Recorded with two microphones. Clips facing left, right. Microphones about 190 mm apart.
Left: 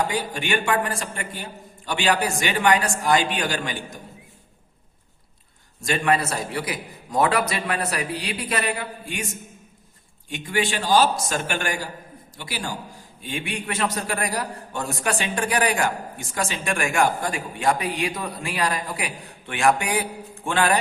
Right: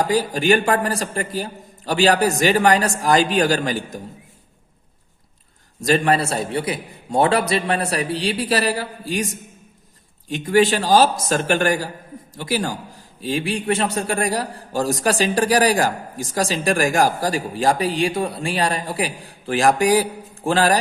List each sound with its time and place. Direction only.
0.1 s a man's voice: 40° right (ahead or behind)
5.8 s a man's voice: 35° right (ahead or behind)